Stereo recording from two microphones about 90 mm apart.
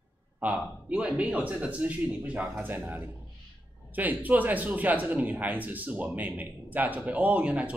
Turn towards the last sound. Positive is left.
turn(degrees=-15)  # may be behind; listen again after turning